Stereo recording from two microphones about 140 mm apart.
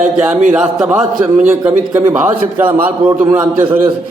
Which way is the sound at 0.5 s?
5° right (ahead or behind).